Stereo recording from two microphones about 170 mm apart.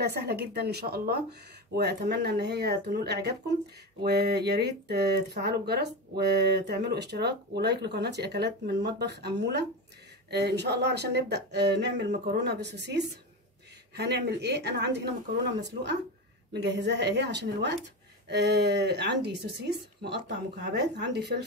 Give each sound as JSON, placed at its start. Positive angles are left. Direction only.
{"t": 0.0, "sound": "speech", "side_deg": -75}
{"t": 1.8, "sound": "speech", "side_deg": -75}
{"t": 13.9, "sound": "speech", "side_deg": -75}
{"t": 16.5, "sound": "a woman's voice", "side_deg": -90}